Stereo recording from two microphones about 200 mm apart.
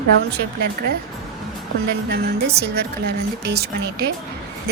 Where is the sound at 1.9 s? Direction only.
50° right (ahead or behind).